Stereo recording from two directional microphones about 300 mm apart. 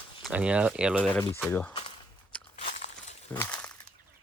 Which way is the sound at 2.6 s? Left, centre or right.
Left.